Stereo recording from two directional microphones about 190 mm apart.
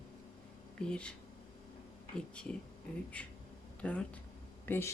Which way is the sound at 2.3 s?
5° left (ahead or behind).